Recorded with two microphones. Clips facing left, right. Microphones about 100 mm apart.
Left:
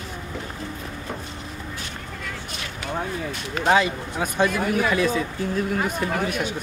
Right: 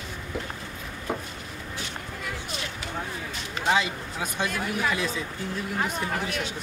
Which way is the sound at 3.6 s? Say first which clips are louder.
Left 5 dB; 55° left (ahead or behind).